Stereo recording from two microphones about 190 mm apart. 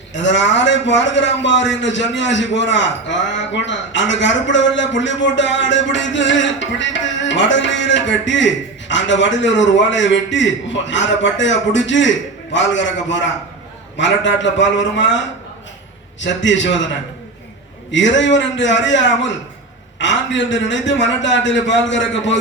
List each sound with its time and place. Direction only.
0.1 s a man's voice: 75° left (ahead or behind)
16.2 s a man's voice: 75° left (ahead or behind)
17.9 s a man's voice: 70° left (ahead or behind)